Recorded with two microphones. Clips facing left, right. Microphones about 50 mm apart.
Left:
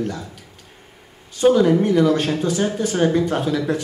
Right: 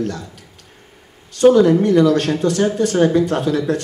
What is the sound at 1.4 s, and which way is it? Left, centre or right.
Speech, centre.